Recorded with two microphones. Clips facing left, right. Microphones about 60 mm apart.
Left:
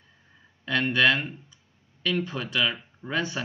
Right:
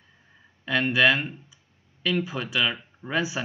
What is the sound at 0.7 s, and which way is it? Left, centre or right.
Speech, centre.